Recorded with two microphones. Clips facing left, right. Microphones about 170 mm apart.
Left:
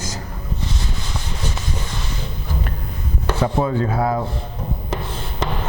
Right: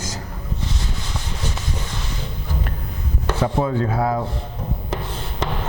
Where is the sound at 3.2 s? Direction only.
30° left (ahead or behind).